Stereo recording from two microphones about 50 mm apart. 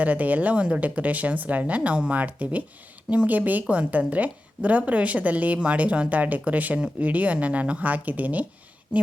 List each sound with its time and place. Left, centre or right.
0.0 s a woman's voice: right